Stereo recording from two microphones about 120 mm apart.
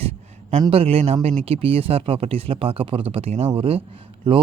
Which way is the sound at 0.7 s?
55° right (ahead or behind).